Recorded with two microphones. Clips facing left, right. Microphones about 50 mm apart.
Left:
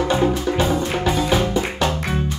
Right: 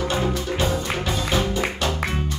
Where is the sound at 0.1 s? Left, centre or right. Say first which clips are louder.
Left 5 dB; centre.